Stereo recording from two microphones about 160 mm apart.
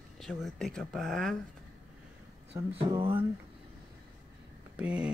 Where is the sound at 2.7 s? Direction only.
35° right (ahead or behind).